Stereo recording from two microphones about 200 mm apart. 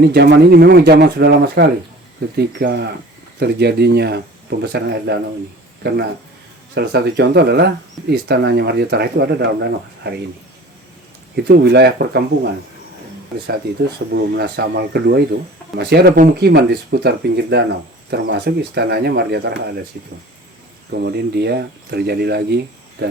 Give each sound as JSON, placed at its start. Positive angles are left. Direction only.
{"t": 0.0, "sound": "speech", "side_deg": -55}
{"t": 11.4, "sound": "speech", "side_deg": -55}
{"t": 14.1, "sound": "speech", "side_deg": -55}
{"t": 20.9, "sound": "speech", "side_deg": -55}